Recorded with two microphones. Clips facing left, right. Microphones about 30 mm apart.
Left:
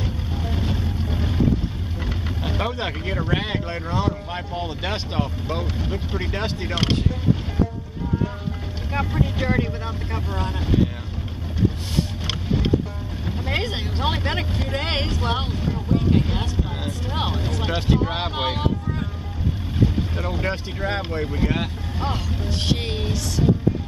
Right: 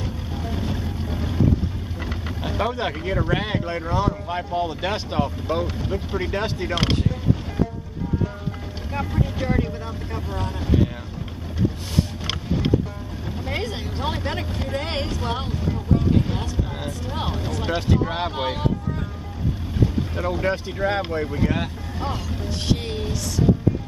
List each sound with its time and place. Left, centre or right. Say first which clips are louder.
0.0 s vehicle: left 1 dB; centre
3.2 s speech: even; centre
9.2 s speech: even; left
13.3 s speech: left 2 dB; left
14.8 s speech: left 3 dB; left
19.8 s speech: even; centre